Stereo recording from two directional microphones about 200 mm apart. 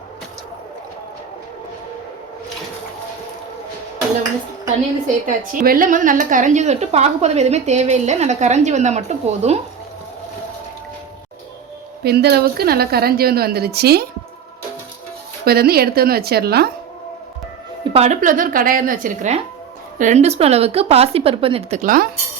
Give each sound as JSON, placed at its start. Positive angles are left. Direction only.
{"t": 5.2, "sound": "a woman's voice", "side_deg": -40}
{"t": 12.0, "sound": "a woman's voice", "side_deg": -55}
{"t": 15.4, "sound": "a woman's voice", "side_deg": -50}
{"t": 17.9, "sound": "a woman's voice", "side_deg": -35}
{"t": 21.8, "sound": "a woman's voice", "side_deg": -45}